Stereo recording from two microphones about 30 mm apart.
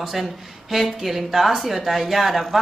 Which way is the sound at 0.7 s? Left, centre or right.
Centre.